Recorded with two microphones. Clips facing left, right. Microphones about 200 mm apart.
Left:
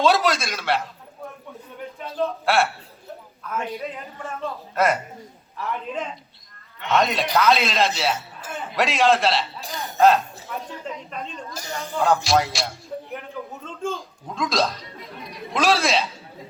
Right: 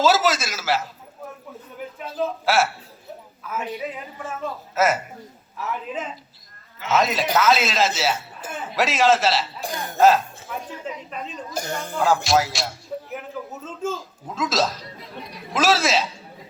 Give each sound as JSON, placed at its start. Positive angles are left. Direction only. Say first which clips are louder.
{"t": 0.0, "sound": "a man's voice", "louder": "even", "side_deg": -5}
{"t": 9.6, "sound": "speech", "louder": "right 3 dB", "side_deg": -50}
{"t": 10.0, "sound": "speech", "louder": "even", "side_deg": 0}
{"t": 11.5, "sound": "speech", "louder": "right 5 dB", "side_deg": -50}
{"t": 11.9, "sound": "speech", "louder": "even", "side_deg": 0}